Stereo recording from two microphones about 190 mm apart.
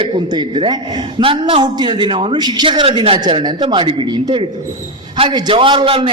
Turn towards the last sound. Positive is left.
turn(degrees=-25)  # may be behind; listen again after turning